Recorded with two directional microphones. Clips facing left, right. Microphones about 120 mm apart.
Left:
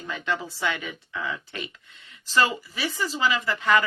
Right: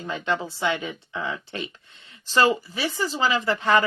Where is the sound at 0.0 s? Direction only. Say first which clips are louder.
Right 3 dB; 25° right (ahead or behind).